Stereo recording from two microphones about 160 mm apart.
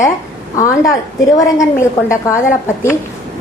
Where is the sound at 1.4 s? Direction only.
20° left (ahead or behind).